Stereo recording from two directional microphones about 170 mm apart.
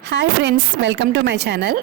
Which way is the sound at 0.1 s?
90° right.